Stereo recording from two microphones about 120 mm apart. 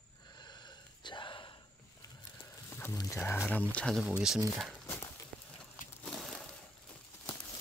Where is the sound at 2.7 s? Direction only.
20° left (ahead or behind).